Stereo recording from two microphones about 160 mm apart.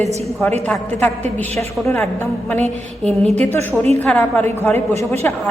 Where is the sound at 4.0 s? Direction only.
10° left (ahead or behind).